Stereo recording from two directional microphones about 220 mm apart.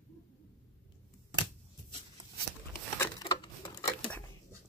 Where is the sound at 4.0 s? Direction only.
5° left (ahead or behind).